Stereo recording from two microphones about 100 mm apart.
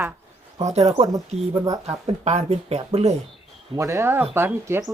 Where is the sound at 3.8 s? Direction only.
30° right (ahead or behind).